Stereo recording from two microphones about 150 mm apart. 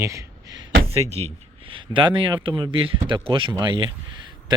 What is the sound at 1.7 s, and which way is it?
Speech, 35° right (ahead or behind).